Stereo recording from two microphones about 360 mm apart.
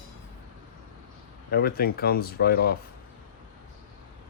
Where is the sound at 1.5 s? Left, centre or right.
Left.